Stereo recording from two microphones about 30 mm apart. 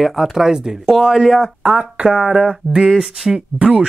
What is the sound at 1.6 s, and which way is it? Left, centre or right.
Speech, right.